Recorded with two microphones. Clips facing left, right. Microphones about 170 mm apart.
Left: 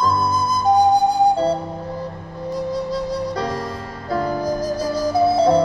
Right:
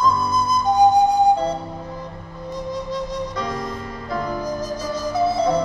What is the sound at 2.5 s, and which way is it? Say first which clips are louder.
Music: left 4 dB; 35° left (ahead or behind).